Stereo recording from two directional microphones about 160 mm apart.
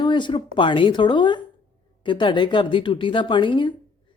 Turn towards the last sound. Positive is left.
turn(degrees=30)  # may be behind; listen again after turning